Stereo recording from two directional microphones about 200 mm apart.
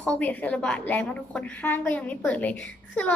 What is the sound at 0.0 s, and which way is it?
A woman's voice, 5° left (ahead or behind).